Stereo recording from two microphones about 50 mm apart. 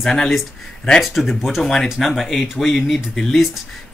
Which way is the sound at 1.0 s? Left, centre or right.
Centre.